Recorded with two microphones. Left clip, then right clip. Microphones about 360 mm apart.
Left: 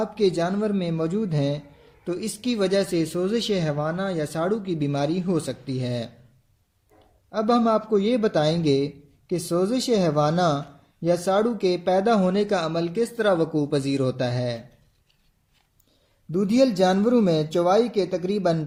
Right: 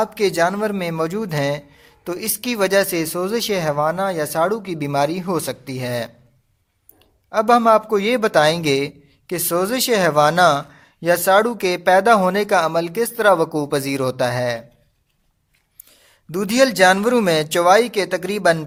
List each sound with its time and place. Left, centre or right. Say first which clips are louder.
0.0 s speech: right 5 dB; centre
7.3 s speech: right 8 dB; centre
16.3 s speech: right 4 dB; right